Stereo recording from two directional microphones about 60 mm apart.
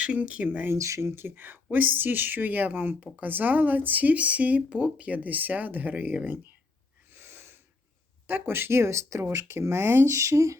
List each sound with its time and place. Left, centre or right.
0.0 s speech: centre
0.7 s speech: right
7.1 s snort: right
8.3 s speech: right